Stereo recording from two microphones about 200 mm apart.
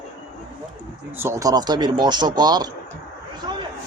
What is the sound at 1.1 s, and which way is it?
Speech, 15° right (ahead or behind).